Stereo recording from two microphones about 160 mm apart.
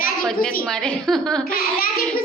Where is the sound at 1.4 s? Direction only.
70° left (ahead or behind).